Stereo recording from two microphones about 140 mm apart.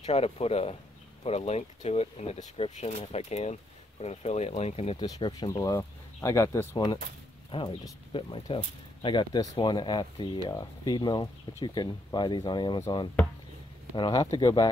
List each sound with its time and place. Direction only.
0.0 s speech: 50° left (ahead or behind)
5.0 s speech: 30° left (ahead or behind)
7.5 s speech: 35° left (ahead or behind)
13.9 s speech: 35° left (ahead or behind)